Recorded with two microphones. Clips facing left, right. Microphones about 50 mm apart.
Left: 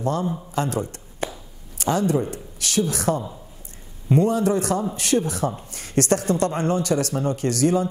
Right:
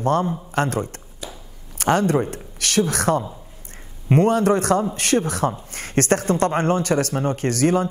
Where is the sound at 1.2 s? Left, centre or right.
Left.